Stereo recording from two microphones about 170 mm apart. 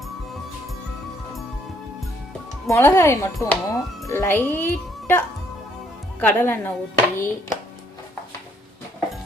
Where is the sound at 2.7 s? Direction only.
15° left (ahead or behind).